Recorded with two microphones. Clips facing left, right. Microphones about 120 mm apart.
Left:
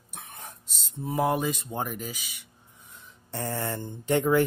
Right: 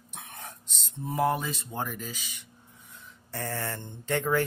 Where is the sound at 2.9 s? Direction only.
20° left (ahead or behind).